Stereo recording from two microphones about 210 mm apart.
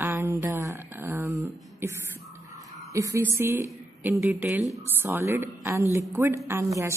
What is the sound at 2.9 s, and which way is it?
A woman's voice, 15° right (ahead or behind).